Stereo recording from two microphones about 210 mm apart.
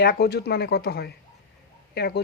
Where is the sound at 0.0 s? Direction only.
50° left (ahead or behind).